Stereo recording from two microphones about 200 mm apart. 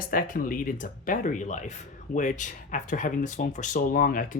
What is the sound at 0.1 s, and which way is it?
Speech, 45° left (ahead or behind).